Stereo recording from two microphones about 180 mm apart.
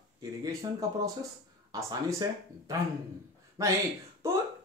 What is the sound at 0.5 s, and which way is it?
Speech, 20° right (ahead or behind).